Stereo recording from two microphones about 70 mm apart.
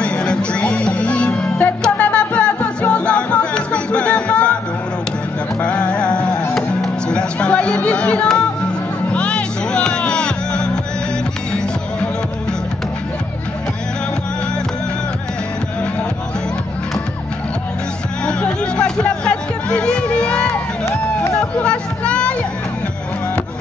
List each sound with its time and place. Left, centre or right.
0.0 s music: centre
5.6 s music: centre
18.8 s music: centre
21.4 s a sound: centre